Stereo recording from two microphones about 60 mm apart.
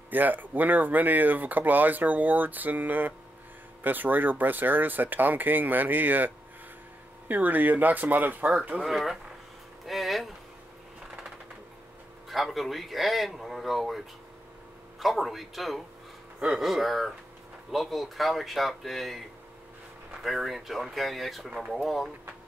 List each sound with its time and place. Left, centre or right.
0.1 s speech: right
8.8 s speech: centre
9.8 s a sound: centre
12.3 s speech: centre